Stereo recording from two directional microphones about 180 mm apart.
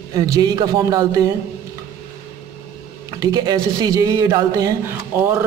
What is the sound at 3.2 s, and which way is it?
A man's voice, 20° right (ahead or behind).